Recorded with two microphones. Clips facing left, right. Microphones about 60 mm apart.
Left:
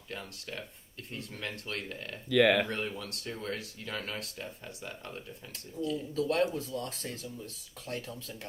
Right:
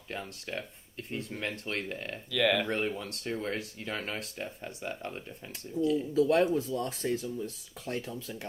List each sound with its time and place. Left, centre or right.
0.1 s speech: right
2.3 s speech: left
2.6 s speech: right
6.1 s speech: centre